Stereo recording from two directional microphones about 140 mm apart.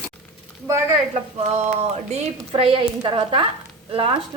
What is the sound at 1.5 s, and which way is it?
Speech, 50° right (ahead or behind).